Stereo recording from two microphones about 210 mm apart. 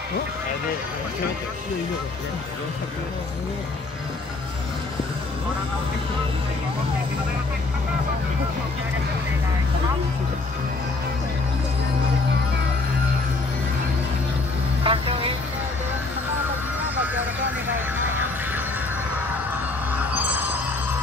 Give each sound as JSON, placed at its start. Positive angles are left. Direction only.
{"t": 14.8, "sound": "speech", "side_deg": -25}
{"t": 20.0, "sound": "vehicle", "side_deg": -5}